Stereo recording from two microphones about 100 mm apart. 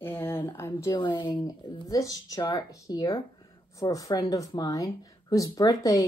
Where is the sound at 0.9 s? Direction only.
55° left (ahead or behind).